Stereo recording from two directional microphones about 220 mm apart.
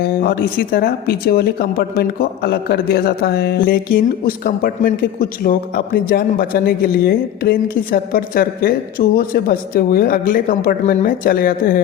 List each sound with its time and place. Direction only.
0.0 s speech: 45° left (ahead or behind)